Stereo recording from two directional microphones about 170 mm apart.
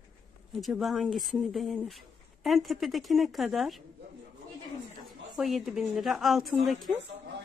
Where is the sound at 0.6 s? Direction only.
Centre (ahead or behind).